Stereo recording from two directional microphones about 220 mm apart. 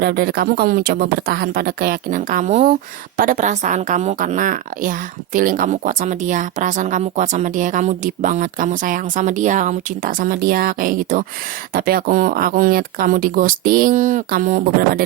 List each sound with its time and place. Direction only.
0.0 s a woman's voice: 45° right (ahead or behind)